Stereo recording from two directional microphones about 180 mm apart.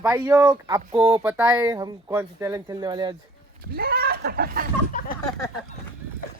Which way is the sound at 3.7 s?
60° right (ahead or behind).